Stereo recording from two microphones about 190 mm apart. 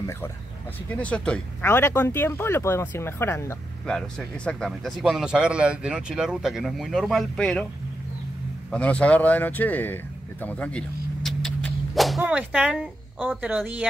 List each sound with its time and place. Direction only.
0.8 s speech: 5° left (ahead or behind)
8.6 s speech: 5° left (ahead or behind)
10.4 s dog: 5° left (ahead or behind)
13.5 s speech: 5° right (ahead or behind)